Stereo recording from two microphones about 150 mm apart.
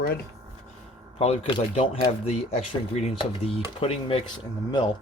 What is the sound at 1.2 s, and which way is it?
Speech, 45° left (ahead or behind).